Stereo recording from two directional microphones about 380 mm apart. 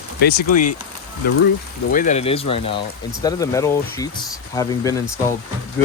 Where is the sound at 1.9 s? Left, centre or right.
Centre.